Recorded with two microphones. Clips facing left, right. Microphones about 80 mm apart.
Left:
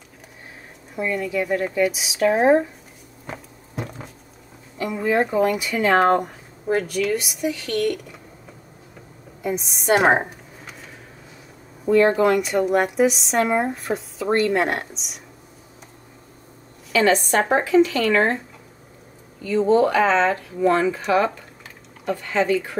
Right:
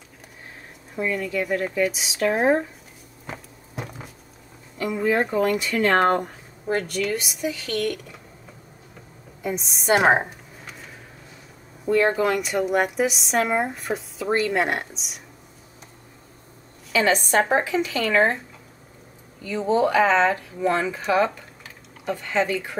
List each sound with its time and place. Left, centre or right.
0.9 s speech: centre
3.3 s a sound: centre
4.7 s speech: centre
9.4 s a sound: centre
11.9 s speech: centre
16.9 s speech: centre
19.7 s speech: centre